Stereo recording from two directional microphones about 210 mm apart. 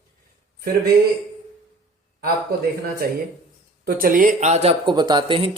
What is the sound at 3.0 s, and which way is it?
Speech, 45° right (ahead or behind).